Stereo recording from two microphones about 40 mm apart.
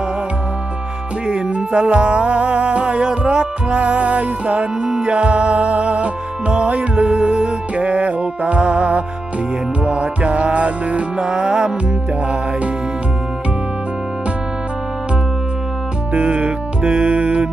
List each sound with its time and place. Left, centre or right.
1.3 s music: right
11.2 s music: centre
16.1 s music: right